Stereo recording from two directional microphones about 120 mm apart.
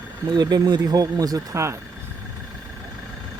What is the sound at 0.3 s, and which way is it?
Speech, 35° right (ahead or behind).